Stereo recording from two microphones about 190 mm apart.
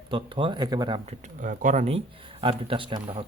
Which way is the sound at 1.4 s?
40° right (ahead or behind).